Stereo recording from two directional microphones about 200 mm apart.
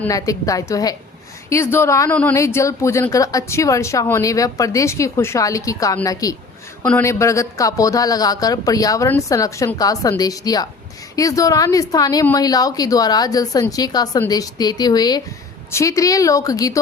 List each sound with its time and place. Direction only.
0.0 s speech: 15° left (ahead or behind)